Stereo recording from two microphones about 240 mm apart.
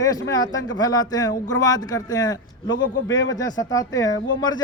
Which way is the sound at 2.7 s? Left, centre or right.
Left.